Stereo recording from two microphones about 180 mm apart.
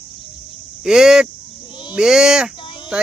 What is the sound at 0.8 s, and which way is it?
Speech, 5° right (ahead or behind).